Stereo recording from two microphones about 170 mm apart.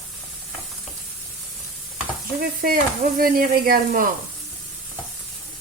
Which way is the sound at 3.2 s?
60° right (ahead or behind).